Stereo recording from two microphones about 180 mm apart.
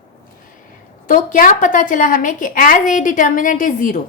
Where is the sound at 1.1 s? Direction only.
50° left (ahead or behind).